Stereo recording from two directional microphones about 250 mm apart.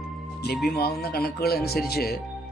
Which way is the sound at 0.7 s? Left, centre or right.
Left.